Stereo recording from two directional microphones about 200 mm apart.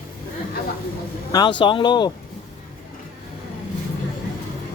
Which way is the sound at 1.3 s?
20° left (ahead or behind).